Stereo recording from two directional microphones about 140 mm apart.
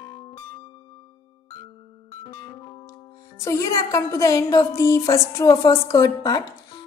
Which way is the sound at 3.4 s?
20° left (ahead or behind).